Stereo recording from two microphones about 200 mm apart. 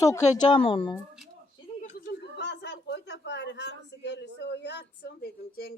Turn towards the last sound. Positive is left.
turn(degrees=50)  # may be behind; listen again after turning